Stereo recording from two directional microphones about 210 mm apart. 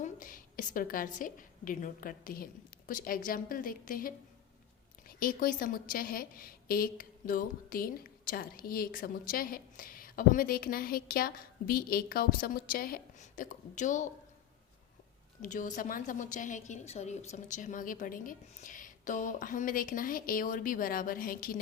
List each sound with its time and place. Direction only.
0.0 s a woman's voice: 40° left (ahead or behind)
15.4 s a woman's voice: 40° left (ahead or behind)